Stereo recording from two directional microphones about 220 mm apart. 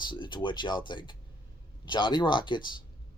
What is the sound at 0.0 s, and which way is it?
Speech, 20° left (ahead or behind).